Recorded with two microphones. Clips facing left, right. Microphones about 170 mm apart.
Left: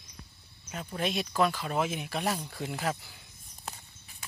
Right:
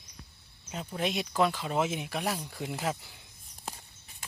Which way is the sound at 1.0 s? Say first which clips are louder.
Even; 20° right (ahead or behind).